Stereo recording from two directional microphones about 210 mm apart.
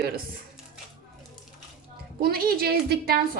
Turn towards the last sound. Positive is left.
turn(degrees=-45)  # may be behind; listen again after turning